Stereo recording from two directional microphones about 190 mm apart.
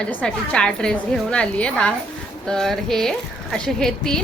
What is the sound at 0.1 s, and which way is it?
Speech, 5° left (ahead or behind).